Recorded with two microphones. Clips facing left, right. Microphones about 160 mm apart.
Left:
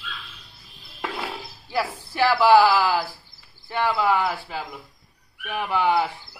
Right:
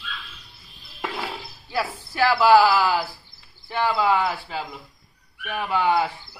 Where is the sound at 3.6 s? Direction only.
5° right (ahead or behind).